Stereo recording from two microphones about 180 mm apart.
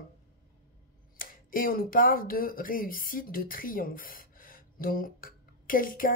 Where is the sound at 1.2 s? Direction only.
50° left (ahead or behind).